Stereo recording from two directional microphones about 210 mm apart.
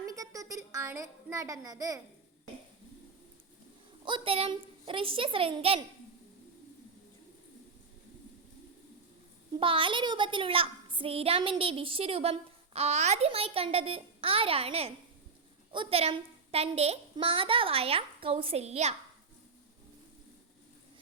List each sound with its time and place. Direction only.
0.1 s a sound: 15° right (ahead or behind)
4.0 s a woman's voice: 25° right (ahead or behind)
9.6 s a woman's voice: 25° right (ahead or behind)